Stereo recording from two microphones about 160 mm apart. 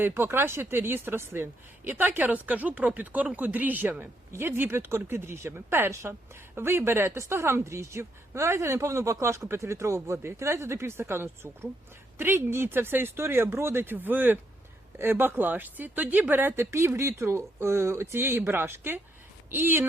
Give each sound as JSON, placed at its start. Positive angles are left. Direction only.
{"t": 0.0, "sound": "speech", "side_deg": -15}